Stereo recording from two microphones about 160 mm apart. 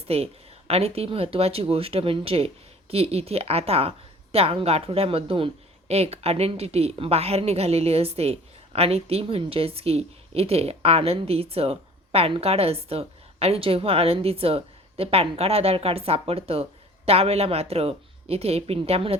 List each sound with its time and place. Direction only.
0.1 s a woman's voice: 40° right (ahead or behind)